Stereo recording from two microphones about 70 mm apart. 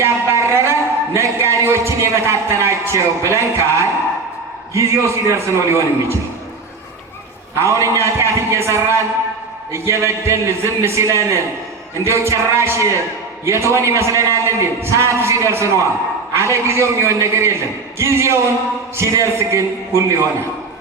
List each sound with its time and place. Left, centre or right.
0.0 s a man's voice: right
7.5 s a man's voice: right